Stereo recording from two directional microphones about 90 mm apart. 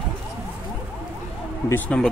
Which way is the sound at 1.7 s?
15° left (ahead or behind).